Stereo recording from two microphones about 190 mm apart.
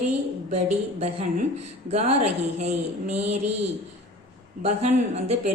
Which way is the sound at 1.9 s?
35° right (ahead or behind).